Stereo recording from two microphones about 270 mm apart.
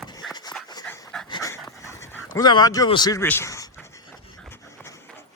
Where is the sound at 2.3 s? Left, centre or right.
Centre.